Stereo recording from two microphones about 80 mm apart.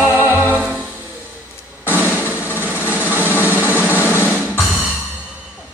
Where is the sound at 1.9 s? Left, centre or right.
Right.